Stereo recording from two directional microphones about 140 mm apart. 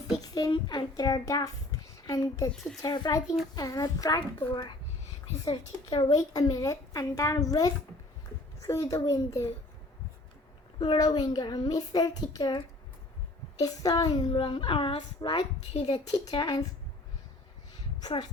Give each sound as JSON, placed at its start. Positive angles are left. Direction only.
{"t": 0.2, "sound": "a child's voice", "side_deg": 30}
{"t": 10.8, "sound": "a child's voice", "side_deg": 30}
{"t": 15.7, "sound": "speech", "side_deg": 55}
{"t": 16.1, "sound": "speech", "side_deg": 30}
{"t": 18.0, "sound": "speech", "side_deg": 30}